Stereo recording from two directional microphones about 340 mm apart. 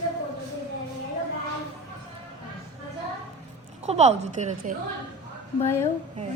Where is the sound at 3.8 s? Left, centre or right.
Centre.